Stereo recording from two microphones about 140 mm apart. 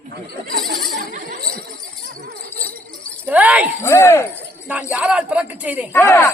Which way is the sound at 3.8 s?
20° left (ahead or behind).